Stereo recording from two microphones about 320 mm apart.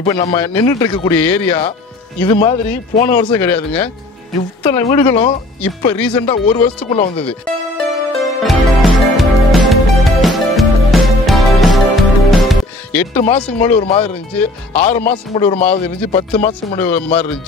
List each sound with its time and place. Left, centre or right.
0.0 s speech: centre
7.2 s music: centre
13.1 s speech: centre